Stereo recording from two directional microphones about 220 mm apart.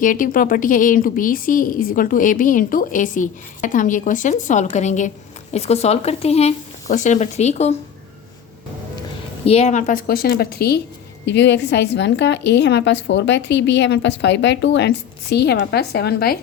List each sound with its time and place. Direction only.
0.0 s a woman's voice: 40° left (ahead or behind)
9.5 s a woman's voice: 30° left (ahead or behind); by 16.4 s 45° left (ahead or behind)